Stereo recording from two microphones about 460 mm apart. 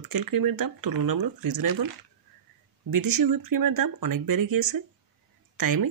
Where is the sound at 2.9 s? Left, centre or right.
Right.